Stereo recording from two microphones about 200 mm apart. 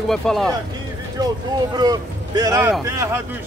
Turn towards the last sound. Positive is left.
turn(degrees=-15)  # may be behind; listen again after turning